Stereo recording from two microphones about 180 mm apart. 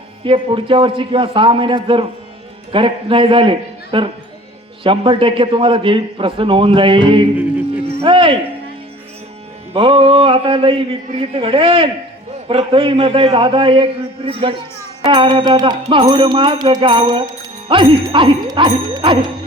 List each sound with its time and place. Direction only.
0.3 s music: 30° right (ahead or behind)
7.9 s cricket: 30° right (ahead or behind)
9.7 s music: 30° right (ahead or behind)
15.0 s music: 25° right (ahead or behind)